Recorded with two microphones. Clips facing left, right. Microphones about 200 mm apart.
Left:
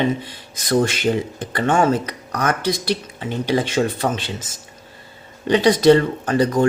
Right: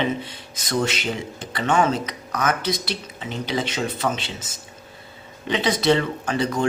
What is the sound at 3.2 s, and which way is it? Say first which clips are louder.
Speech: left 4 dB; 55° left (ahead or behind).